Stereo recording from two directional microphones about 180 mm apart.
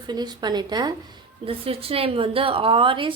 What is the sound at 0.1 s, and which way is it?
A woman's voice, 25° right (ahead or behind).